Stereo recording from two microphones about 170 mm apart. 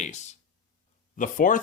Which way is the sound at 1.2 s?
50° left (ahead or behind).